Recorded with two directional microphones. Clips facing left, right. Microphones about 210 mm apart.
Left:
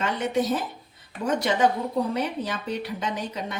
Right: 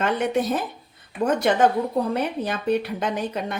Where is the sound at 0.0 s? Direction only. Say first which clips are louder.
Right 3 dB; 55° right (ahead or behind).